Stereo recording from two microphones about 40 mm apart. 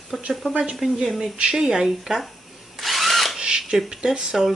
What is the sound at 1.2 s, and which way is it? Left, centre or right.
Speech, centre.